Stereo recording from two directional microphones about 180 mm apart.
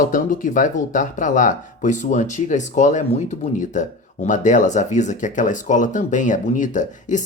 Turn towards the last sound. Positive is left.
turn(degrees=45)  # may be behind; listen again after turning